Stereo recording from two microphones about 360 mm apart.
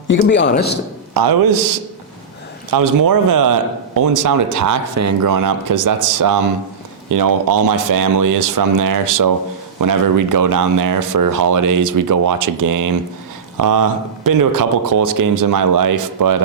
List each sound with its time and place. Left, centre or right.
0.1 s a man's voice: left
1.1 s a man's voice: right
2.6 s speech: right